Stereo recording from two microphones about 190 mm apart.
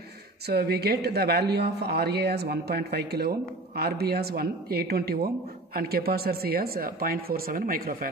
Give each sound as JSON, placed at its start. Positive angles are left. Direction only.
{"t": 0.5, "sound": "speech", "side_deg": -55}